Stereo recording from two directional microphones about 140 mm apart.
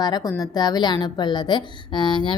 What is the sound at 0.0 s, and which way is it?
A woman's voice, 30° left (ahead or behind).